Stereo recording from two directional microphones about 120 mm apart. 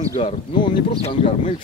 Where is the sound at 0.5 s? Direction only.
45° left (ahead or behind).